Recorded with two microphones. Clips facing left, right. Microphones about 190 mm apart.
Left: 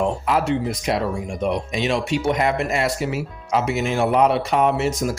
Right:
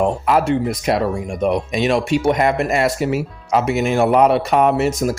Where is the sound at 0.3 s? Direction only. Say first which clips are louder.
Right 4 dB; 55° right (ahead or behind).